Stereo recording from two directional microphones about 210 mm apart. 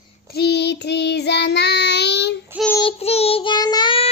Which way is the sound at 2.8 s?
25° left (ahead or behind).